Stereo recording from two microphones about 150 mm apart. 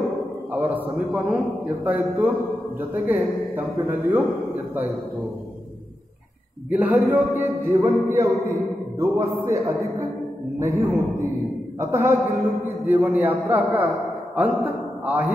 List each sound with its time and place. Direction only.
0.5 s music: 10° right (ahead or behind)
6.7 s music: 10° right (ahead or behind)
9.0 s a man's voice: 20° right (ahead or behind)
11.8 s music: 15° right (ahead or behind)
12.8 s a man's voice: 10° right (ahead or behind)